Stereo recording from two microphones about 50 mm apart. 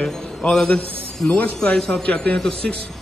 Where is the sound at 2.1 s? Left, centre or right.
Left.